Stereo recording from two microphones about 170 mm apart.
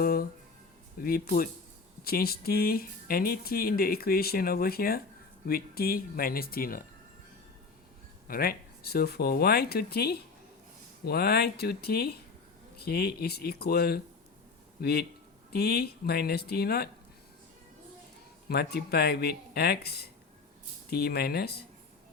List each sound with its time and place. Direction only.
0.0 s music: 60° left (ahead or behind)
0.9 s speech: 60° left (ahead or behind)
8.3 s a man's voice: 60° left (ahead or behind)
18.4 s speech: 65° left (ahead or behind)